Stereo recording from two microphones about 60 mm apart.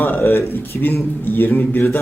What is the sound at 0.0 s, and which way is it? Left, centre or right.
Speech, left.